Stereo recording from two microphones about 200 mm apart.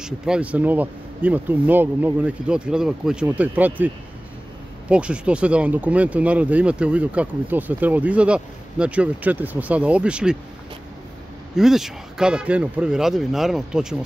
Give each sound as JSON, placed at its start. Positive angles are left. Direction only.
{"t": 0.0, "sound": "speech", "side_deg": -5}
{"t": 11.5, "sound": "speech", "side_deg": 0}